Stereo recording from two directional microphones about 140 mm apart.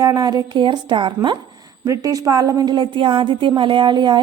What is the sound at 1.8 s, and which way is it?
A woman's voice, 25° right (ahead or behind).